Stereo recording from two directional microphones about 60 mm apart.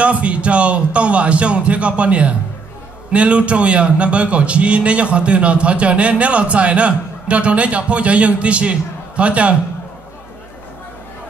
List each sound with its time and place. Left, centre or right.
0.0 s a man's voice: right